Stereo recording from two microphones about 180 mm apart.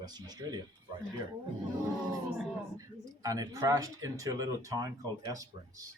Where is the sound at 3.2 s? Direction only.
20° right (ahead or behind).